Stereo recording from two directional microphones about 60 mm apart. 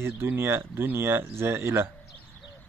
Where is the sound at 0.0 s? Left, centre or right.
Right.